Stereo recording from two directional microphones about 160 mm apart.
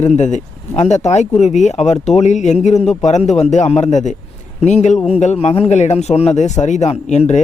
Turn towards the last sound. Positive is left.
turn(degrees=45)  # may be behind; listen again after turning